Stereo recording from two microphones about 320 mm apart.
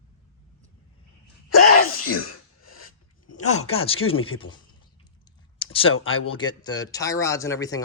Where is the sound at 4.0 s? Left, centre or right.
Left.